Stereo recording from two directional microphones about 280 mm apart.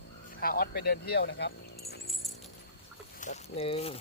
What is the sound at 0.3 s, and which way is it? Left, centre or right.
Speech, left.